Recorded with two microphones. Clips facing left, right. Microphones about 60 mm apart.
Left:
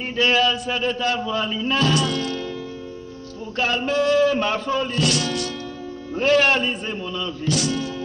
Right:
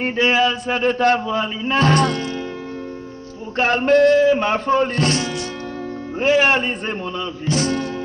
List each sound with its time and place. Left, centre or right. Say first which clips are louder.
0.1 s a man's voice: even; right
0.7 s speech: right 6 dB; right
1.2 s speech: right 2 dB; right
2.1 s music: right 1 dB; right
3.5 s speech: right 7 dB; right
4.2 s a man's voice: right 3 dB; right
4.6 s a man's voice: right 4 dB; right
6.6 s speech: right 2 dB; right